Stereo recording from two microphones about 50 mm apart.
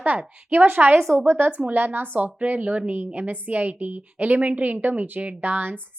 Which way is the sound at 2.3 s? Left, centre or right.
Right.